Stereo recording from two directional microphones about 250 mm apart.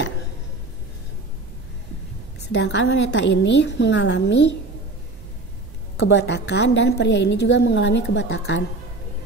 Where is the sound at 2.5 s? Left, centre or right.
Left.